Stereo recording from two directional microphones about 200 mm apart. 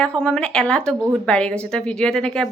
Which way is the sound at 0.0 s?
5° left (ahead or behind).